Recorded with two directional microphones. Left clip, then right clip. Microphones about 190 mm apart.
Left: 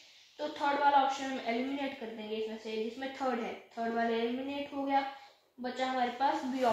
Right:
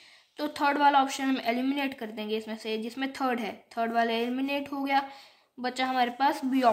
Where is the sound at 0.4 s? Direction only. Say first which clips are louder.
Right 6 dB; 50° right (ahead or behind).